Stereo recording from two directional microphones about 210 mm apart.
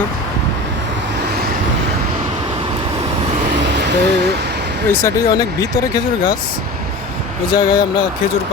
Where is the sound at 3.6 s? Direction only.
55° right (ahead or behind).